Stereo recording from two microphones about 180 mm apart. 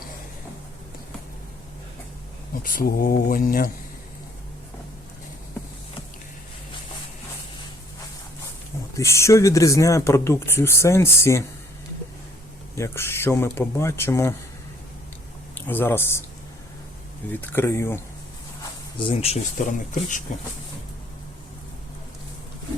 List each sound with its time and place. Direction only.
2.6 s speech: 55° left (ahead or behind)
9.0 s speech: 15° left (ahead or behind)
12.7 s speech: 15° left (ahead or behind)
15.5 s speech: 10° left (ahead or behind)
17.4 s speech: 10° left (ahead or behind)
18.9 s speech: 30° left (ahead or behind)